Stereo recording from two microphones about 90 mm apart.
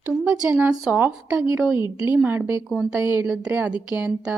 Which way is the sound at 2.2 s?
25° right (ahead or behind).